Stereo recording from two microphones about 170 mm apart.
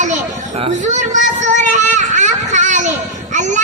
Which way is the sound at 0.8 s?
45° right (ahead or behind).